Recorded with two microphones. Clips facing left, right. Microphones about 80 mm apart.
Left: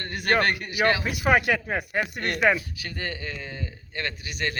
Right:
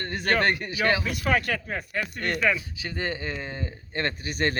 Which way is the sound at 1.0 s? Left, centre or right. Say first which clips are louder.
Left 4 dB; centre.